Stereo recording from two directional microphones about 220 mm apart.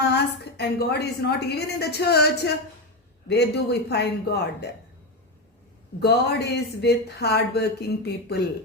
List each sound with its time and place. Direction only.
0.0 s a woman's voice: 50° left (ahead or behind)
6.0 s a woman's voice: 50° left (ahead or behind)